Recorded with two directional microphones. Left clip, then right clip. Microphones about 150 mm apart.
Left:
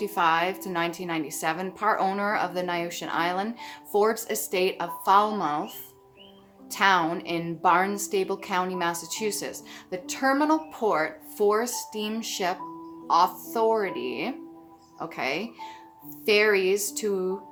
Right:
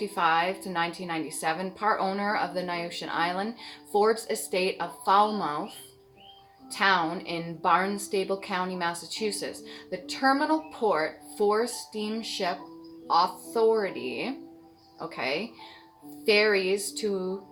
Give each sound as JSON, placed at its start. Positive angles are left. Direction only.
{"t": 0.0, "sound": "a woman's voice", "side_deg": 20}
{"t": 6.7, "sound": "a woman's voice", "side_deg": 20}